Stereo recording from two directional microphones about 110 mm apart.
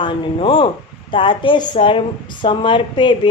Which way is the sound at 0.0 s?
50° left (ahead or behind).